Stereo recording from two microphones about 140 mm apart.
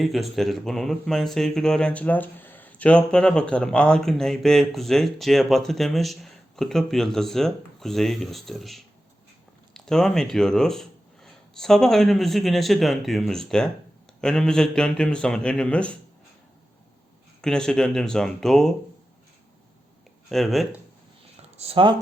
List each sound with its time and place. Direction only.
0.0 s speech: centre (ahead or behind)
17.4 s speech: 5° left (ahead or behind)
20.3 s speech: centre (ahead or behind)
21.6 s speech: 40° right (ahead or behind)